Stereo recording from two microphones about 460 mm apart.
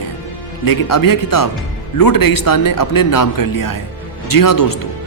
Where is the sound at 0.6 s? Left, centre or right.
Left.